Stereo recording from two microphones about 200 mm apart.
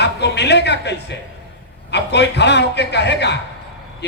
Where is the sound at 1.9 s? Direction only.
60° left (ahead or behind).